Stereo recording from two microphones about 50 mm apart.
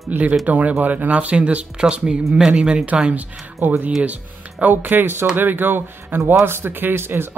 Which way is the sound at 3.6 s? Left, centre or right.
Right.